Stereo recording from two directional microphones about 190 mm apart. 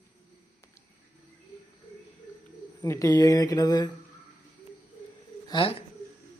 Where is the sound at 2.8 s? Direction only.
15° left (ahead or behind).